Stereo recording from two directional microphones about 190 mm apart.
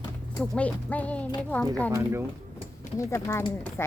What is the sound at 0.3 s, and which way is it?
Speech, 5° left (ahead or behind).